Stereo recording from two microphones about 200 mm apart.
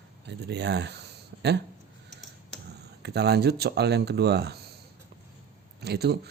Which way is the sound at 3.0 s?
55° right (ahead or behind).